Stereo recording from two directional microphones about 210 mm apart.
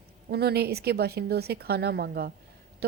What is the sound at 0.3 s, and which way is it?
A woman's voice, 50° right (ahead or behind).